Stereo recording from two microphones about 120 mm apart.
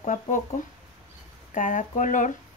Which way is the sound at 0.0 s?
90° left.